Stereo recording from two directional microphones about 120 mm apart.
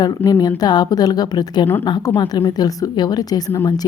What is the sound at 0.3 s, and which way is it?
A woman's voice, 30° left (ahead or behind).